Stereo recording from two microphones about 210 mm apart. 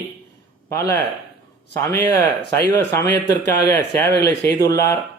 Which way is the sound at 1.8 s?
15° left (ahead or behind).